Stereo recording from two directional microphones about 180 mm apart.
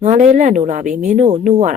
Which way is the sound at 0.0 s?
40° right (ahead or behind).